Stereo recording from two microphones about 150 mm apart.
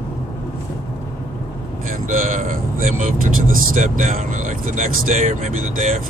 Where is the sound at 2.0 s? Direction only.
60° right (ahead or behind).